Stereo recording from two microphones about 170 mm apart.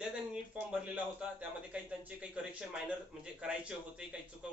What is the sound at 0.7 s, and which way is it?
A man's voice, 5° right (ahead or behind).